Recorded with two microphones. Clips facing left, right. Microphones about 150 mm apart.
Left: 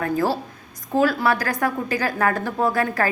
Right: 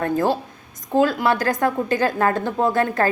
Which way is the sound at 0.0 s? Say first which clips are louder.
Right 2 dB; 20° right (ahead or behind).